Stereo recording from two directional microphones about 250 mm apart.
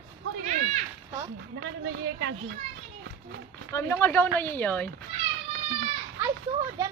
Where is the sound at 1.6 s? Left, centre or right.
Right.